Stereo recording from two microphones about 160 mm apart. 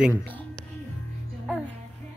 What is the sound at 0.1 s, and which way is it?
Speech, 10° left (ahead or behind).